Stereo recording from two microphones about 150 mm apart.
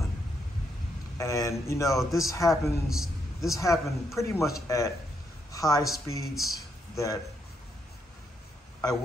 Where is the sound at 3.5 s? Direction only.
20° left (ahead or behind).